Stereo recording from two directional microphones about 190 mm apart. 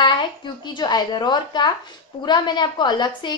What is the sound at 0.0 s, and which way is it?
A woman's voice, 25° left (ahead or behind).